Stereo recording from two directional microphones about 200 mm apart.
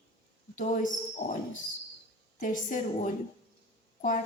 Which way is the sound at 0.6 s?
40° left (ahead or behind).